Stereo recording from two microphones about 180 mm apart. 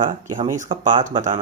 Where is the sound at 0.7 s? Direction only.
25° right (ahead or behind).